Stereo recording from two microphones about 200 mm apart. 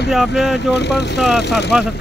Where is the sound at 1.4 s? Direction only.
55° left (ahead or behind).